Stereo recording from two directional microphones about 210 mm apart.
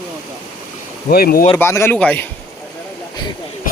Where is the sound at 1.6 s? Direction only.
10° left (ahead or behind).